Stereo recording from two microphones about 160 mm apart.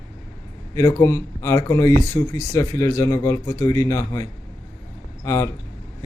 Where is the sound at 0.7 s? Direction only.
20° left (ahead or behind).